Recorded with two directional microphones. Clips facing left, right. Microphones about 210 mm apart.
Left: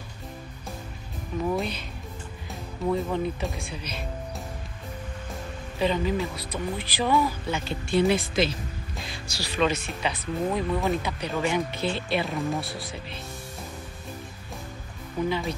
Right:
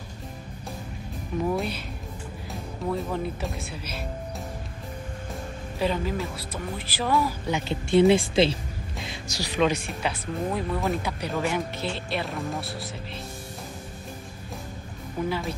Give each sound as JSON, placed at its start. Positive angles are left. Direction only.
{"t": 1.5, "sound": "speech", "side_deg": 0}
{"t": 2.9, "sound": "speech", "side_deg": 0}
{"t": 5.8, "sound": "speech", "side_deg": -5}
{"t": 7.4, "sound": "speech", "side_deg": -20}
{"t": 9.1, "sound": "speech", "side_deg": -15}
{"t": 15.2, "sound": "speech", "side_deg": -5}